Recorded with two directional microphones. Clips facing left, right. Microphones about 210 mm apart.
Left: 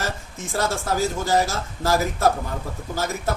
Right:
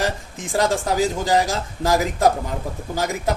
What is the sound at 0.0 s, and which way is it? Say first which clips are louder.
Speech: right 5 dB; 15° right (ahead or behind).